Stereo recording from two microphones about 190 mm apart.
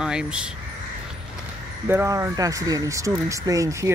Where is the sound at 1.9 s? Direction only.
15° right (ahead or behind).